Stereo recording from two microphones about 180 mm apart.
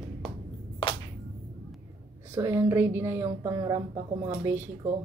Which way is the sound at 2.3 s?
15° right (ahead or behind).